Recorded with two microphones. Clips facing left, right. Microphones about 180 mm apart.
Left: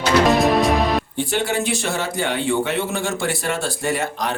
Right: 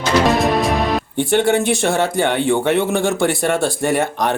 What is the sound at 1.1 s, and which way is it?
Music, 50° right (ahead or behind).